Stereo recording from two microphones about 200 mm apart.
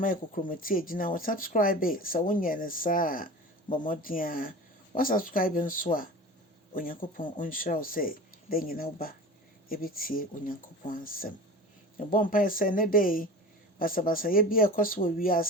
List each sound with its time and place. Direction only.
0.0 s speech: 45° left (ahead or behind)